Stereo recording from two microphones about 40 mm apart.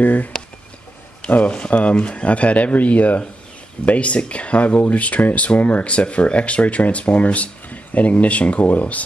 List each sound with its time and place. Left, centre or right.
0.0 s speech: left
1.5 s speech: left